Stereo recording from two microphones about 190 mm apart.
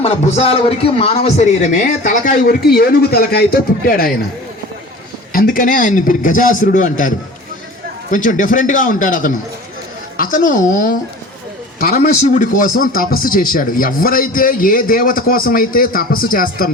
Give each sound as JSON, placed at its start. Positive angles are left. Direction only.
{"t": 0.0, "sound": "a man's voice", "side_deg": 35}
{"t": 5.3, "sound": "a man's voice", "side_deg": 50}
{"t": 8.1, "sound": "a man's voice", "side_deg": 45}